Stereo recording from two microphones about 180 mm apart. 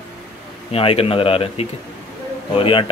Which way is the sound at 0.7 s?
35° left (ahead or behind).